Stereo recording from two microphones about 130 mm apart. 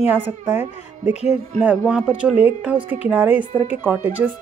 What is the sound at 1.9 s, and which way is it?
A woman's voice, 5° right (ahead or behind).